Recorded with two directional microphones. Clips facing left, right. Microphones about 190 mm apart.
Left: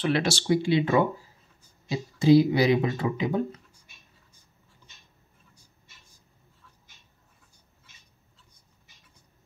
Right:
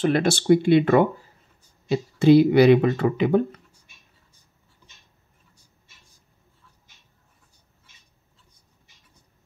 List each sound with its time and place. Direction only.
0.0 s speech: 50° right (ahead or behind); by 3.4 s 65° right (ahead or behind)